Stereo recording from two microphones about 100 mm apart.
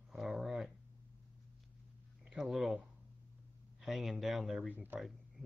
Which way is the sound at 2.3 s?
Centre (ahead or behind).